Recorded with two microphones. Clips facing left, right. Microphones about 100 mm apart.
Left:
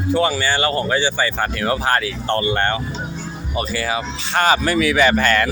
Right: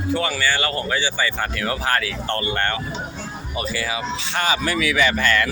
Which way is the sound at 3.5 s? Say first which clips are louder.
Left 4 dB; 45° left (ahead or behind).